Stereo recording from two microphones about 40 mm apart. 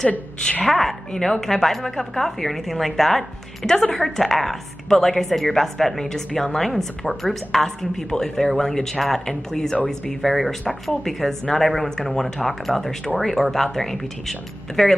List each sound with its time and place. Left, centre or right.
0.4 s a woman's voice: left
0.7 s a woman's voice: centre
10.3 s a woman's voice: centre